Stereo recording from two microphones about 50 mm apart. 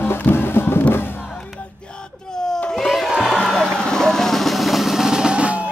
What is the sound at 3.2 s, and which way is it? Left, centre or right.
Vehicle, centre.